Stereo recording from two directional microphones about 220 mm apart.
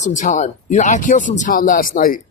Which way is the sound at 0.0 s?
35° left (ahead or behind).